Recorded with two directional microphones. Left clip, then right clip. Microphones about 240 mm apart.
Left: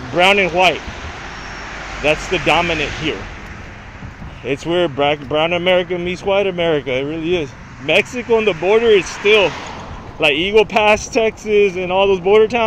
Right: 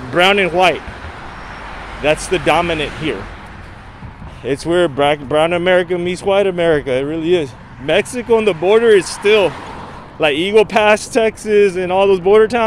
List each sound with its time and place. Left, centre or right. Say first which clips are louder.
0.1 s speech: right 1 dB; centre
2.3 s speech: right 1 dB; centre
4.6 s speech: right 2 dB; right
9.4 s speech: even; right
10.4 s speech: right 3 dB; centre